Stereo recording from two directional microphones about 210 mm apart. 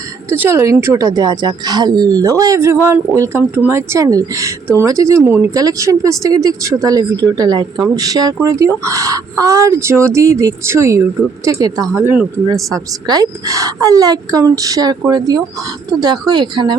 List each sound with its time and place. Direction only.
0.3 s speech: 10° right (ahead or behind)